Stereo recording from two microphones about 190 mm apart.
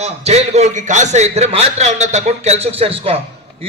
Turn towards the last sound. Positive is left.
turn(degrees=-30)  # may be behind; listen again after turning